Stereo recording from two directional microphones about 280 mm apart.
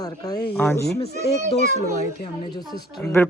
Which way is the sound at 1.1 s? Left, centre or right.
Left.